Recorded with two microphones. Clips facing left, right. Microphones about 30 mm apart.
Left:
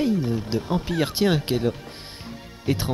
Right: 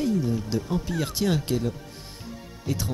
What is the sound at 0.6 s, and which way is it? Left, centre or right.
Speech, left.